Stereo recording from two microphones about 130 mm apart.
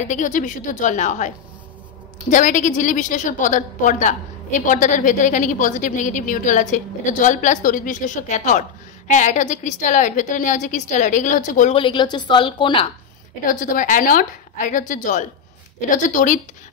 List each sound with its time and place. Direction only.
0.0 s a woman's voice: 75° left (ahead or behind)
2.3 s a woman's voice: 75° left (ahead or behind)
11.7 s a woman's voice: 40° left (ahead or behind)
13.5 s a woman's voice: 90° left